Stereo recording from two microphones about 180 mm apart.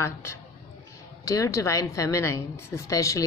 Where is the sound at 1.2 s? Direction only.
15° left (ahead or behind).